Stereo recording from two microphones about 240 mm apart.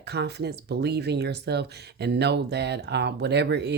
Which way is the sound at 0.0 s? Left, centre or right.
Right.